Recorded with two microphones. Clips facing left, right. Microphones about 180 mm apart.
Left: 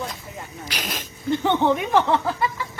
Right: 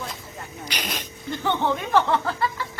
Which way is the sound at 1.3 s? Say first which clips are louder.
Left 5 dB; 20° left (ahead or behind).